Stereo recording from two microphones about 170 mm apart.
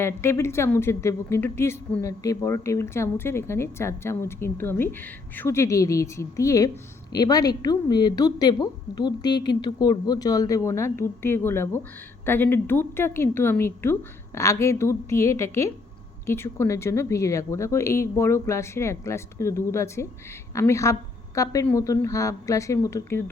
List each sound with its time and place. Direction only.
0.0 s a woman's voice: 15° left (ahead or behind)